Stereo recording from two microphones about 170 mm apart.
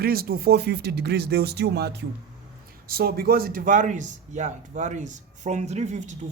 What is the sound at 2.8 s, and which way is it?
A man's voice, 60° right (ahead or behind).